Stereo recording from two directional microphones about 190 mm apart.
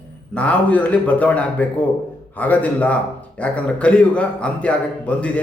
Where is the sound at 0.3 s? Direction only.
5° left (ahead or behind).